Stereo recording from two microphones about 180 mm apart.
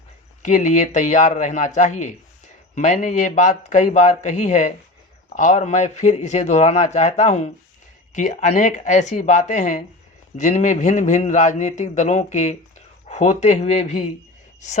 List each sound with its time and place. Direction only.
0.4 s a man's voice: 45° left (ahead or behind)